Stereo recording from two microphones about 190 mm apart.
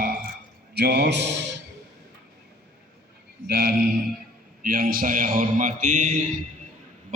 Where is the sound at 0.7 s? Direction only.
60° right (ahead or behind).